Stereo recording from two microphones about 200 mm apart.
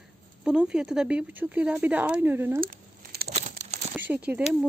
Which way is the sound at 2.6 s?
50° right (ahead or behind).